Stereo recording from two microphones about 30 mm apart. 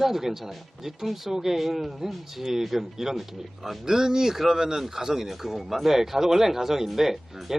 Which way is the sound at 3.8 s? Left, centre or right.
Centre.